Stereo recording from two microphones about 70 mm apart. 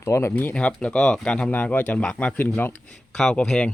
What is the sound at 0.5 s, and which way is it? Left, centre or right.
Speech, centre.